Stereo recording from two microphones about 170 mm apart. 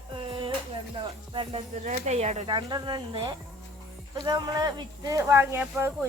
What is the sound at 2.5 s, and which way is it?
Speech, 25° right (ahead or behind).